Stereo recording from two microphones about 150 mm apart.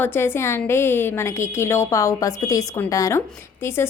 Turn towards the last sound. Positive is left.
turn(degrees=15)  # may be behind; listen again after turning